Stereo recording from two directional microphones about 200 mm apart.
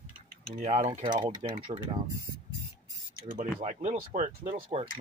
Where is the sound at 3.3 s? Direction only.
35° right (ahead or behind).